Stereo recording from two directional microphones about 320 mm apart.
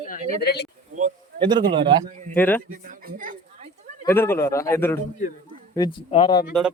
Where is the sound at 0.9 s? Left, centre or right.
Centre.